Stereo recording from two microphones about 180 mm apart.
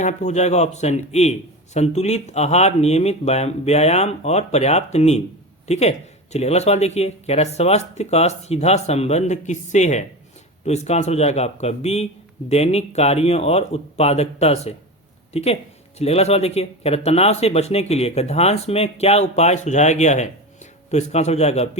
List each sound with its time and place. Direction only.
0.0 s speech: 40° left (ahead or behind)